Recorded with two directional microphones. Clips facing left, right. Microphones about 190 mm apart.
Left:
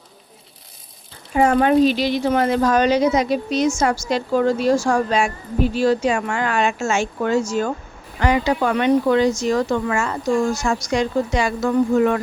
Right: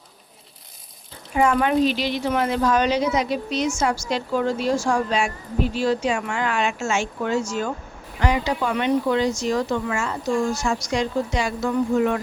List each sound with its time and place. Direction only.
1.4 s a woman's voice: 40° left (ahead or behind)
8.2 s a woman's voice: 55° left (ahead or behind)